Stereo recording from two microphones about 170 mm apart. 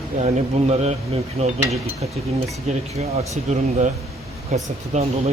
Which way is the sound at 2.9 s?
40° right (ahead or behind).